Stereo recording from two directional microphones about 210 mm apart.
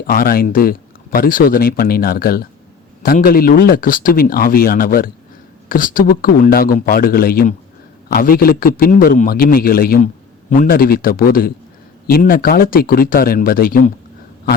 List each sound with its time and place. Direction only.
0.1 s speech: 45° left (ahead or behind)